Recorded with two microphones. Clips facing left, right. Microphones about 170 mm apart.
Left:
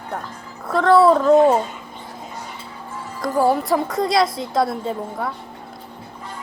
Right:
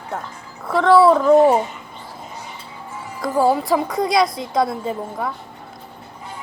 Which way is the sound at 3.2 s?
Centre (ahead or behind).